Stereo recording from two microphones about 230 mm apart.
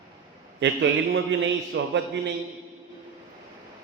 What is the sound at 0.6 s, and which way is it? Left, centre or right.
A man's voice, right.